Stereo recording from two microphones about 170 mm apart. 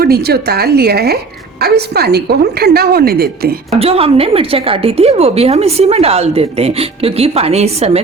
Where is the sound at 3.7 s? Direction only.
35° right (ahead or behind).